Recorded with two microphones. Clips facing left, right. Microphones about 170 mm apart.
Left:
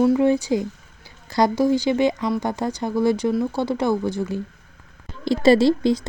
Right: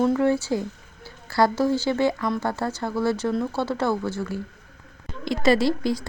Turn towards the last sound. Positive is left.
turn(degrees=25)  # may be behind; listen again after turning